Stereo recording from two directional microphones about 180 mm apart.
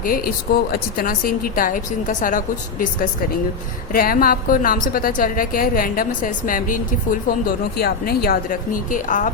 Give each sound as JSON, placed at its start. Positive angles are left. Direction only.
{"t": 0.7, "sound": "a woman's voice", "side_deg": 55}